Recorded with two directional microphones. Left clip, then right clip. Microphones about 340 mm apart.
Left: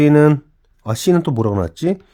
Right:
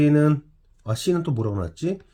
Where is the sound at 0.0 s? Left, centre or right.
Left.